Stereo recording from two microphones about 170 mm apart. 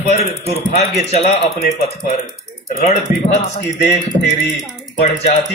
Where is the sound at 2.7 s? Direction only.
50° left (ahead or behind).